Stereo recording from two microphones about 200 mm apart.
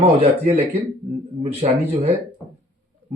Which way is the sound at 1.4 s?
30° right (ahead or behind).